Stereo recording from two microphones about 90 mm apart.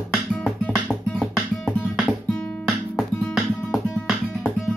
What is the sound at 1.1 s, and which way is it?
Music, 15° left (ahead or behind).